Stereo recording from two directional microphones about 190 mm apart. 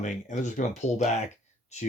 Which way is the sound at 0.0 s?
40° left (ahead or behind).